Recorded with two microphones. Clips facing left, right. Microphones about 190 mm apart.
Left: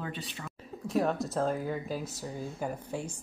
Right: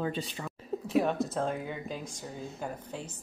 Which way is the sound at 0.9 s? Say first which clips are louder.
Right 1 dB; centre (ahead or behind).